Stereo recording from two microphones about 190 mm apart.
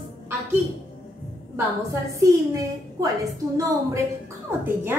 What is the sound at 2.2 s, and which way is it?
Speech, 15° right (ahead or behind).